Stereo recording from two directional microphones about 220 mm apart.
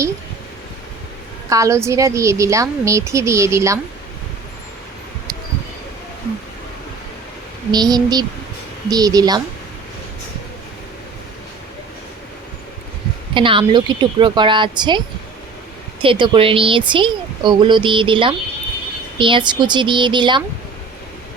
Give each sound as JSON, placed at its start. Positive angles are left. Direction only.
{"t": 1.5, "sound": "a woman's voice", "side_deg": -15}
{"t": 7.7, "sound": "a woman's voice", "side_deg": -20}
{"t": 13.3, "sound": "speech", "side_deg": -25}